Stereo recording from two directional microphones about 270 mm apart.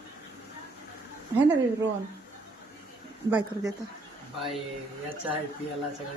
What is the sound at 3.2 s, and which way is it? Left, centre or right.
Speech, centre.